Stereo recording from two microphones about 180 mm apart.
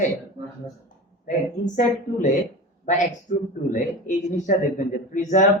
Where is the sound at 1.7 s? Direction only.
45° left (ahead or behind).